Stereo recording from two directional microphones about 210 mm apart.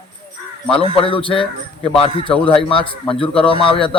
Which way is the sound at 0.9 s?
25° left (ahead or behind).